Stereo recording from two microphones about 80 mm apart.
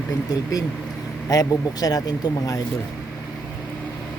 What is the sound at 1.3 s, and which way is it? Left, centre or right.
Speech, left.